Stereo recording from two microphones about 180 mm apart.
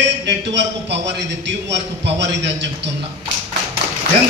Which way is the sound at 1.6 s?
75° right (ahead or behind).